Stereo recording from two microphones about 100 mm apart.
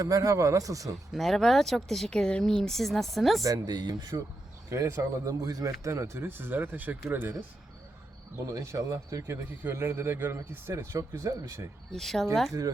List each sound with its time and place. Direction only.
0.0 s speech: 35° right (ahead or behind)
1.1 s speech: centre (ahead or behind)
3.4 s speech: 40° right (ahead or behind)
4.7 s speech: 30° right (ahead or behind)
8.4 s speech: 30° right (ahead or behind)
11.9 s speech: 5° left (ahead or behind)